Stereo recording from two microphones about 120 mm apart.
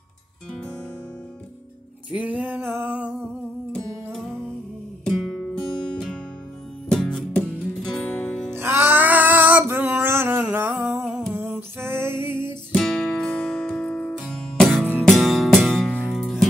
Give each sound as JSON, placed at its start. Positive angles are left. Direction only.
{"t": 2.0, "sound": "music", "side_deg": -10}
{"t": 3.7, "sound": "music", "side_deg": 5}
{"t": 8.5, "sound": "music", "side_deg": -20}
{"t": 11.1, "sound": "a sound", "side_deg": 5}
{"t": 11.8, "sound": "music", "side_deg": -20}
{"t": 12.7, "sound": "music", "side_deg": 0}
{"t": 15.1, "sound": "music", "side_deg": 0}